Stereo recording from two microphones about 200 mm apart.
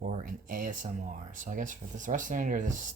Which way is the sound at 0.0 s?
40° right (ahead or behind).